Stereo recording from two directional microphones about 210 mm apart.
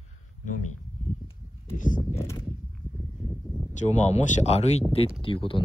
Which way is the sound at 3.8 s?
35° left (ahead or behind).